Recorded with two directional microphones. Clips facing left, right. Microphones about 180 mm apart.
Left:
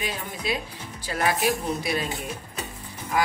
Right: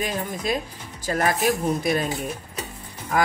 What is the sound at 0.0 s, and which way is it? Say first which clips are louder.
Speech: right 4 dB; 45° right (ahead or behind).